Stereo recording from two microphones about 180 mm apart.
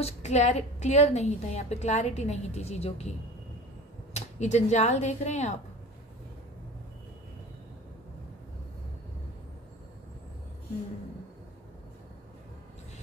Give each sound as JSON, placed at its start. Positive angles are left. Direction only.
{"t": 0.0, "sound": "a woman's voice", "side_deg": 40}
{"t": 4.1, "sound": "a woman's voice", "side_deg": 40}